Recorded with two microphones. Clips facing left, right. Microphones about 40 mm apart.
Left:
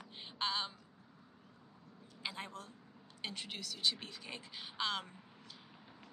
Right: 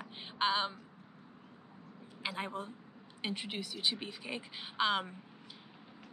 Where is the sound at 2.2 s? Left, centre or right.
Right.